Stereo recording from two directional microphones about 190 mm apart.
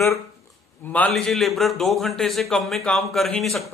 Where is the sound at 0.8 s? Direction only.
10° left (ahead or behind).